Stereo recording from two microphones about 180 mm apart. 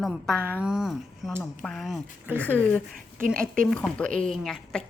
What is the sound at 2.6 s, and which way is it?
A woman's voice, 10° left (ahead or behind).